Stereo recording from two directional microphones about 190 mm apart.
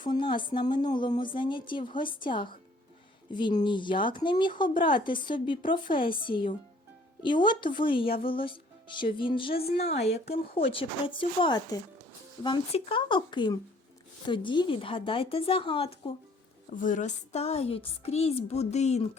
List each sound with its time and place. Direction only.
0.0 s speech: 25° left (ahead or behind)
9.8 s a woman's voice: 55° left (ahead or behind)
10.5 s speech: 30° left (ahead or behind)
16.6 s a woman's voice: 40° left (ahead or behind)